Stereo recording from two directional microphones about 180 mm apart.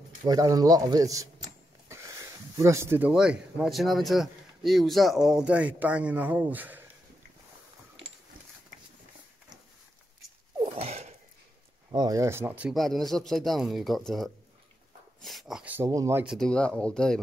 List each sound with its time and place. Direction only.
0.3 s speech: 20° right (ahead or behind)
10.6 s gasp: 30° right (ahead or behind)
11.9 s a man's voice: 20° right (ahead or behind)
16.3 s a man's voice: 5° left (ahead or behind)